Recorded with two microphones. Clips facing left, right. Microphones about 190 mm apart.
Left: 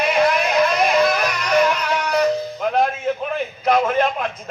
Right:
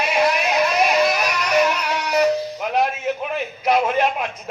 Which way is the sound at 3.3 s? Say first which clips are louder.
Left 1 dB; 50° left (ahead or behind).